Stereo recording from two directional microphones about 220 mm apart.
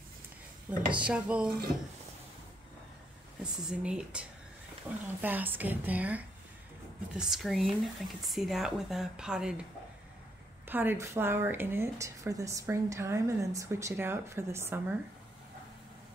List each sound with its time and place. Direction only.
0.9 s speech: 5° right (ahead or behind)
3.6 s a woman's voice: 5° right (ahead or behind)
10.7 s a woman's voice: 10° right (ahead or behind)